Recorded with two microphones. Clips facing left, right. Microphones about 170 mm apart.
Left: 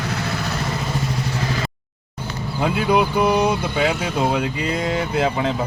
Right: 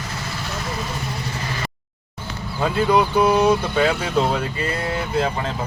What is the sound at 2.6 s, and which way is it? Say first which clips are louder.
Speech: even; 15° left (ahead or behind).